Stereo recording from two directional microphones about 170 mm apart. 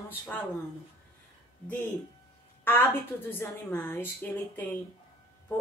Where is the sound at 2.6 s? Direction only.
10° left (ahead or behind).